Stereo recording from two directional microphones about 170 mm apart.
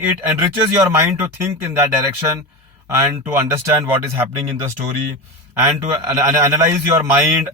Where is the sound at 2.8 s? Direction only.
15° right (ahead or behind).